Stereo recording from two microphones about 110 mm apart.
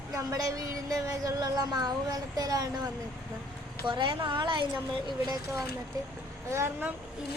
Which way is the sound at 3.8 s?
45° right (ahead or behind).